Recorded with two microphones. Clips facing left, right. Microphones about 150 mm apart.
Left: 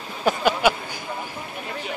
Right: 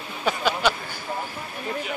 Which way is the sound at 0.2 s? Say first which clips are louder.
Left 3 dB; 10° left (ahead or behind).